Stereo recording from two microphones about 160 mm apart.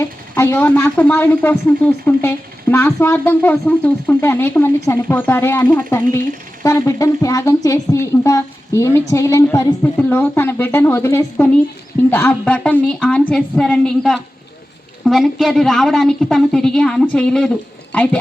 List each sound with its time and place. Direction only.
0.0 s a woman's voice: 15° left (ahead or behind)